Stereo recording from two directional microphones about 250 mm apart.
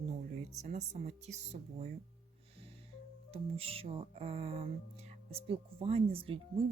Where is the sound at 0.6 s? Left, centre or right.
Right.